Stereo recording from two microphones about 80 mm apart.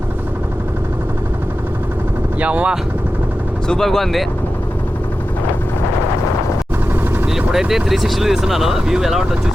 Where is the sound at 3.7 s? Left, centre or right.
Centre.